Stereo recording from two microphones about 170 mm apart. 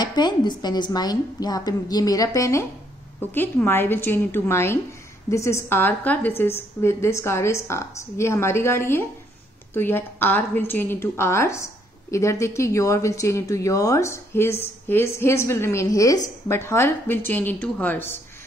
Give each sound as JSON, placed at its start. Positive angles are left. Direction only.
{"t": 0.0, "sound": "a woman's voice", "side_deg": 25}